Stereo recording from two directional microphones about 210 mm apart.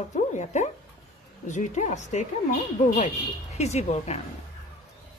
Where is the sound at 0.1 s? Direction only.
35° left (ahead or behind).